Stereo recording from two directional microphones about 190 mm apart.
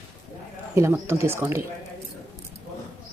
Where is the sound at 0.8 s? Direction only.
15° right (ahead or behind).